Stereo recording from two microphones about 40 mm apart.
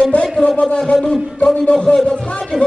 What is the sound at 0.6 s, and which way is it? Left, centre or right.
A man's voice, left.